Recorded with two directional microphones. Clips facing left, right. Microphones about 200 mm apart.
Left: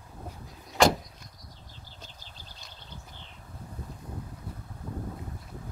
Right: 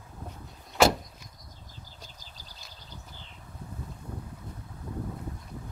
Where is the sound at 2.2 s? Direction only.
40° right (ahead or behind).